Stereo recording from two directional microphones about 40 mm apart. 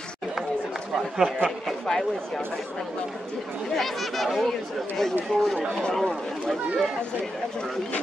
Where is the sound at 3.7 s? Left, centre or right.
Centre.